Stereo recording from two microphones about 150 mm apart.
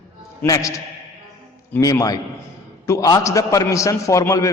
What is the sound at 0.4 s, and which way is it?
Speech, 20° left (ahead or behind).